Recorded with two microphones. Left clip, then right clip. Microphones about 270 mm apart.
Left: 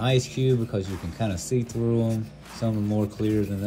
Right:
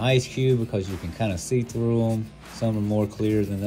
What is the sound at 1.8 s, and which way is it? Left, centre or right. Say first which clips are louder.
Speech: right 1 dB; centre.